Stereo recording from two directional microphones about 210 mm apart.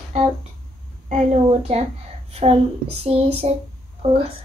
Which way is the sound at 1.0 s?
30° right (ahead or behind).